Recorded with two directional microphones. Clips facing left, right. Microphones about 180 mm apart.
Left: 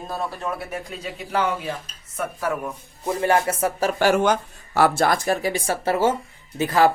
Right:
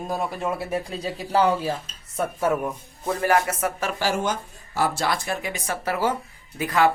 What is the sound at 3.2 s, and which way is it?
Music, 30° left (ahead or behind).